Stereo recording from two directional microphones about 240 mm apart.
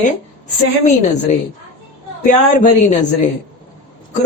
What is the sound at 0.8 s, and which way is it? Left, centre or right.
A woman's voice, left.